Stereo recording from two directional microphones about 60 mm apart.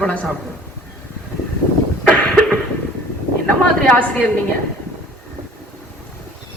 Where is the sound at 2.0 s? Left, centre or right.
Left.